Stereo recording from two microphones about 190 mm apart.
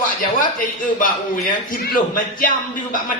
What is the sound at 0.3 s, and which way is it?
A man's voice, 45° left (ahead or behind).